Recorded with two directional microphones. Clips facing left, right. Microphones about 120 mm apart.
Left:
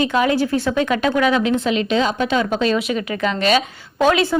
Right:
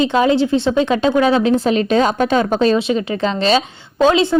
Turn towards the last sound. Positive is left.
turn(degrees=-25)  # may be behind; listen again after turning